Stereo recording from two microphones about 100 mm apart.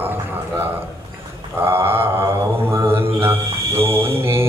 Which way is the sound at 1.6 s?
25° right (ahead or behind).